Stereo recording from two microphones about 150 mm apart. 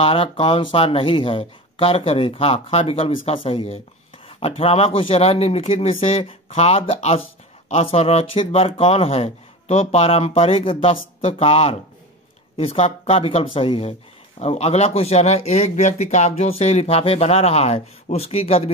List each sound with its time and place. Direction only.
0.0 s speech: 35° left (ahead or behind)